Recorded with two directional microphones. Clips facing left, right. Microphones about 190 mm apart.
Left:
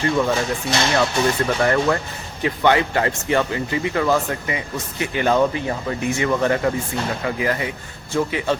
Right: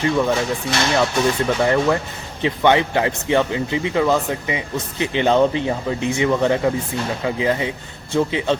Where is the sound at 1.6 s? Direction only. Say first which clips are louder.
Right 1 dB; 10° right (ahead or behind).